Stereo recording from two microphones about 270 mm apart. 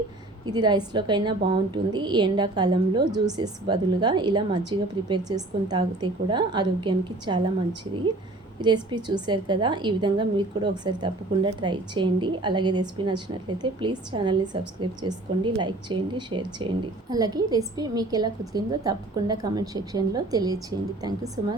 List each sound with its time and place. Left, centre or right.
0.4 s a woman's voice: centre
8.6 s a woman's voice: centre